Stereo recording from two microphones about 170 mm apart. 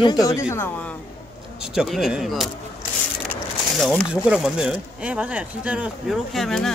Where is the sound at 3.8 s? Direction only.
Centre (ahead or behind).